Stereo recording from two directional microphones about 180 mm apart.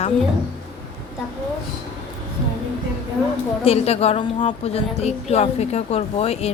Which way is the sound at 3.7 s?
35° left (ahead or behind).